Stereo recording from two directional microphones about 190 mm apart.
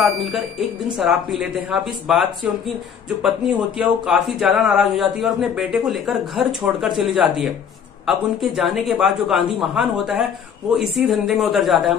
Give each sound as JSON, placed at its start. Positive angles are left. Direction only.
{"t": 0.0, "sound": "a man's voice", "side_deg": 0}
{"t": 3.7, "sound": "a man's voice", "side_deg": -5}